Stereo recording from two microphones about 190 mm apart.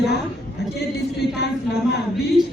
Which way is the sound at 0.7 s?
60° left (ahead or behind).